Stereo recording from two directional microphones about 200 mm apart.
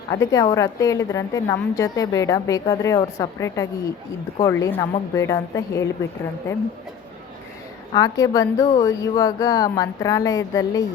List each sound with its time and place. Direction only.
0.1 s a woman's voice: 15° left (ahead or behind)
7.9 s a woman's voice: 15° left (ahead or behind)